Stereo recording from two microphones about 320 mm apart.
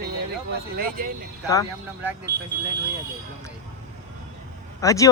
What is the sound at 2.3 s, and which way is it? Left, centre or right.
Speech, right.